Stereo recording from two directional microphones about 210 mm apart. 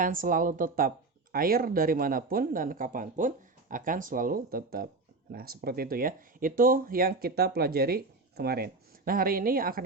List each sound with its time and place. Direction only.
0.0 s speech: 40° right (ahead or behind)